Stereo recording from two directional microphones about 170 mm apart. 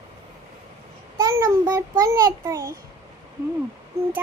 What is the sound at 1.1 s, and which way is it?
A child's voice, 20° right (ahead or behind).